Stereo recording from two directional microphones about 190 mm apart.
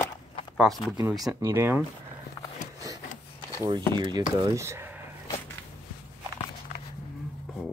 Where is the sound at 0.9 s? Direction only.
20° right (ahead or behind).